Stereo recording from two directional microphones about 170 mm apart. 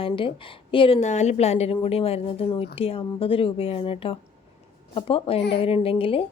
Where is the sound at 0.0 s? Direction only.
30° left (ahead or behind).